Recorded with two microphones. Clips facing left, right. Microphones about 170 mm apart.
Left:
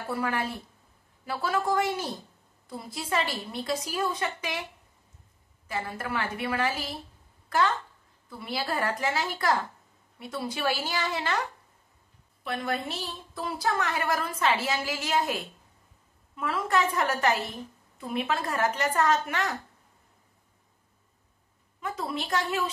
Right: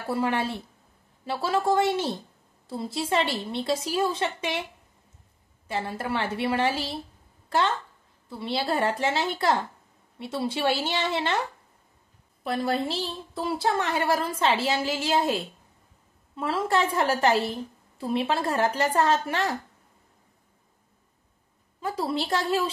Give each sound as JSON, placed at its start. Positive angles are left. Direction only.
{"t": 0.1, "sound": "a woman's voice", "side_deg": -25}
{"t": 5.7, "sound": "a woman's voice", "side_deg": -25}
{"t": 12.4, "sound": "a woman's voice", "side_deg": -30}
{"t": 21.7, "sound": "a woman's voice", "side_deg": -30}